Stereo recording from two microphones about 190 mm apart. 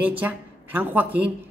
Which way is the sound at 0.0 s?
10° right (ahead or behind).